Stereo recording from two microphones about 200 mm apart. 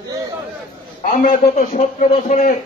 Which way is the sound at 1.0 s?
40° left (ahead or behind).